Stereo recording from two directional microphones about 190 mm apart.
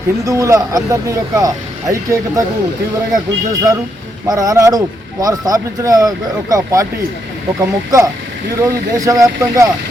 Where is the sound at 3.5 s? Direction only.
20° right (ahead or behind).